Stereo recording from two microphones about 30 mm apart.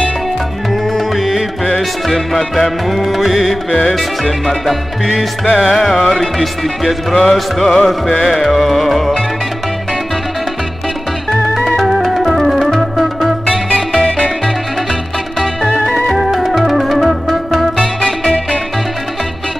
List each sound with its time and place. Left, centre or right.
0.9 s music: centre
11.6 s organ: centre
12.9 s music: centre
13.9 s music: left
16.2 s music: centre